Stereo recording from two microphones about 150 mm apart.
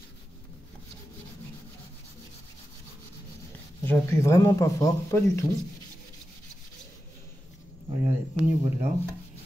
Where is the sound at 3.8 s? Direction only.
15° left (ahead or behind).